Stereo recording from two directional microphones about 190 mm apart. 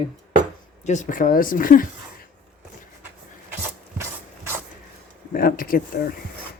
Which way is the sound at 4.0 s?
15° right (ahead or behind).